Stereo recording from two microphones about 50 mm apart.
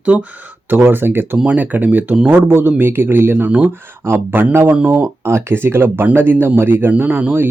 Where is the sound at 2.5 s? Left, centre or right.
Right.